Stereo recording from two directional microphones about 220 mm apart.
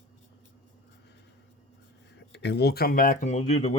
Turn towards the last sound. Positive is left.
turn(degrees=30)  # may be behind; listen again after turning